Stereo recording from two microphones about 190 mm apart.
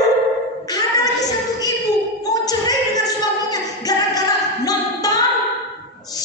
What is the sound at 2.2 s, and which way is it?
Singing, 20° left (ahead or behind).